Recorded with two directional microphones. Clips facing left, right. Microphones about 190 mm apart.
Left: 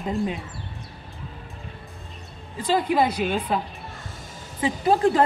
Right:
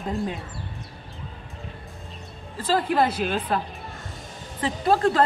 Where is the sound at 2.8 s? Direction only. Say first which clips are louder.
Left 1 dB; 10° left (ahead or behind).